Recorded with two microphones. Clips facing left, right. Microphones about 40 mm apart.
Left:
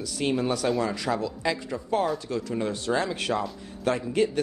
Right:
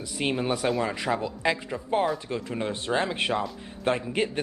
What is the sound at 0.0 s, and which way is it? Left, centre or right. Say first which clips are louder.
Speech: left 1 dB; right.